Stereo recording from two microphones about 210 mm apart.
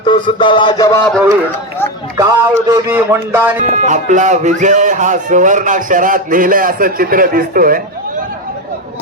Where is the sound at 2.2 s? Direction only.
15° right (ahead or behind).